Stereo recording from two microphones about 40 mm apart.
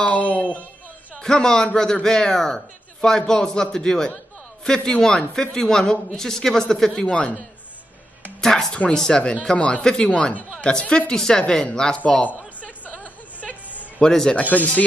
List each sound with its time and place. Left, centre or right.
0.0 s speech: left
1.2 s a woman's voice: centre
8.4 s a woman's voice: centre
12.5 s a sound: left
14.0 s speech: centre
14.4 s speech: left